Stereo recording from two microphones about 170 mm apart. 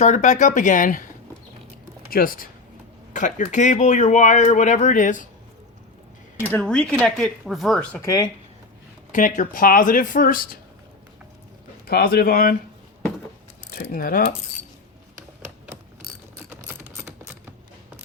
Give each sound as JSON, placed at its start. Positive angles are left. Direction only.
{"t": 0.0, "sound": "speech", "side_deg": 45}
{"t": 2.0, "sound": "speech", "side_deg": 55}
{"t": 6.4, "sound": "speech", "side_deg": 10}
{"t": 8.0, "sound": "speech", "side_deg": 20}
{"t": 9.1, "sound": "speech", "side_deg": 50}
{"t": 11.9, "sound": "speech", "side_deg": 65}
{"t": 13.9, "sound": "speech", "side_deg": 55}